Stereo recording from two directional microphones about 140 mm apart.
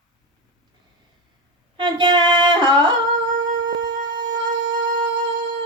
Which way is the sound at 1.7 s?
35° right (ahead or behind).